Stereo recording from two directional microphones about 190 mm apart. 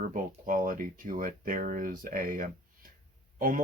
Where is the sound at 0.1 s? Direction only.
45° right (ahead or behind).